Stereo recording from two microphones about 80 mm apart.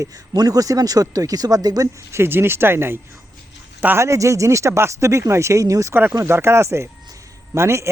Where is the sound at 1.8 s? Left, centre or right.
Right.